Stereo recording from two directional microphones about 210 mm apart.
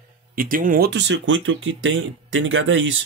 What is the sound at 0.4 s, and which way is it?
Speech, 40° right (ahead or behind).